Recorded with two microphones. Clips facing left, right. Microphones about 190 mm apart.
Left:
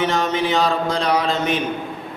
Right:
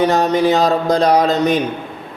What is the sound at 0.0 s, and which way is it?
A man's voice, 40° right (ahead or behind).